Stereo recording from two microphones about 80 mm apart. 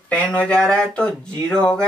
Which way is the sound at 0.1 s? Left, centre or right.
Centre.